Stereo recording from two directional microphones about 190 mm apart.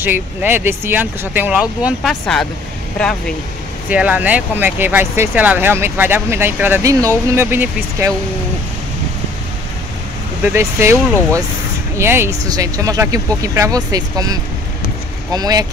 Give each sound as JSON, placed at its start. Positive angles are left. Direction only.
{"t": 0.0, "sound": "speech", "side_deg": -10}
{"t": 3.9, "sound": "speech", "side_deg": -5}
{"t": 10.4, "sound": "speech", "side_deg": -10}
{"t": 12.0, "sound": "speech", "side_deg": -15}